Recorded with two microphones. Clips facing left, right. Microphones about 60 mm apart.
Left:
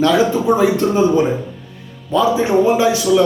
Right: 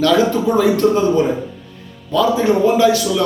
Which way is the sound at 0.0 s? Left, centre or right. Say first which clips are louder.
Even; centre.